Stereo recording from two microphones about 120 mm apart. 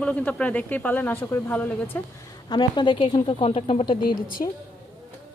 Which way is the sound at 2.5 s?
40° left (ahead or behind).